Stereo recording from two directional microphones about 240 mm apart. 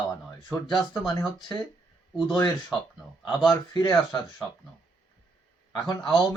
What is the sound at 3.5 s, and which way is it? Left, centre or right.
Speech, centre.